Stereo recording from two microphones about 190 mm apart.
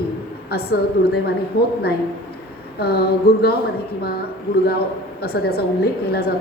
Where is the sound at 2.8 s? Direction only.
55° left (ahead or behind).